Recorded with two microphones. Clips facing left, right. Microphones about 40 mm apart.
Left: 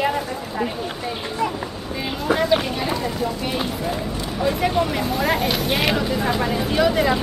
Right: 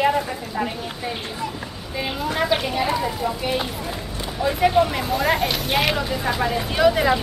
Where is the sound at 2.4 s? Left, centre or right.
Centre.